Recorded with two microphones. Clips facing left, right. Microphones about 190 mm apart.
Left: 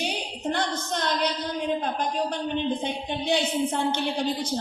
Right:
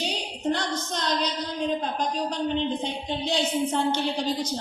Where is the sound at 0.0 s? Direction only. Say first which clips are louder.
Right 1 dB; 55° left (ahead or behind).